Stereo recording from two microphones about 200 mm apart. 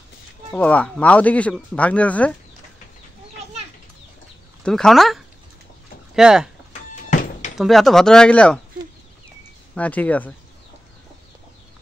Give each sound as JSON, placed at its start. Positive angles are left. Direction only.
{"t": 0.5, "sound": "speech", "side_deg": 5}
{"t": 4.6, "sound": "speech", "side_deg": 5}
{"t": 7.1, "sound": "thunk", "side_deg": 40}
{"t": 7.5, "sound": "speech", "side_deg": 0}
{"t": 9.8, "sound": "speech", "side_deg": 5}